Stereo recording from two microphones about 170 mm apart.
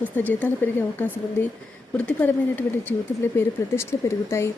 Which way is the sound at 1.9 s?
10° left (ahead or behind).